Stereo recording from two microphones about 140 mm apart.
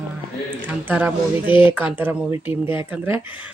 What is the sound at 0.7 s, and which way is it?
Speech, 10° right (ahead or behind).